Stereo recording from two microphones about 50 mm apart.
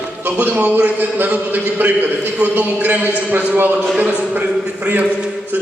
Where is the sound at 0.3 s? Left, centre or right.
Right.